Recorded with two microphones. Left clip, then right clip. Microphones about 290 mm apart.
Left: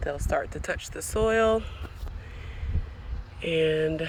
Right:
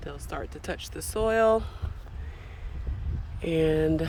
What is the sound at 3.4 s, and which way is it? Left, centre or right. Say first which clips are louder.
Speech: even; centre.